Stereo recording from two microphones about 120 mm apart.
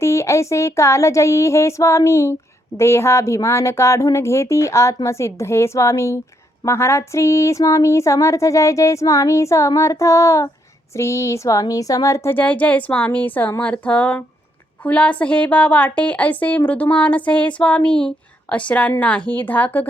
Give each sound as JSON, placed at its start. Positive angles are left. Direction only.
{"t": 0.0, "sound": "a woman's voice", "side_deg": 25}